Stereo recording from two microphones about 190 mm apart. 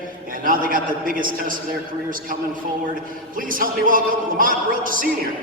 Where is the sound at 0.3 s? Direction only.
45° right (ahead or behind).